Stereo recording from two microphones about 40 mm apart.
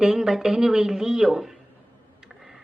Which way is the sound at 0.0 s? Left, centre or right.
Centre.